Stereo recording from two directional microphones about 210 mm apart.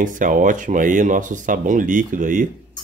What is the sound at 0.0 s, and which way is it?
Speech, 40° right (ahead or behind).